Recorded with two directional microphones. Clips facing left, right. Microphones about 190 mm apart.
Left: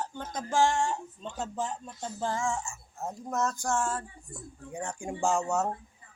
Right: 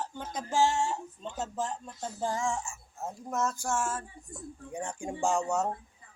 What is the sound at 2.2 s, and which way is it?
Speech, 15° right (ahead or behind).